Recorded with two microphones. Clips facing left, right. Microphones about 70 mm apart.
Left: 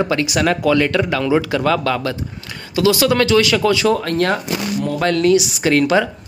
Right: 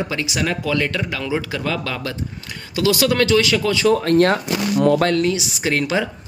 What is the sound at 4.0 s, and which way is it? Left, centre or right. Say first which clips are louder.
Speech: right 3 dB; right.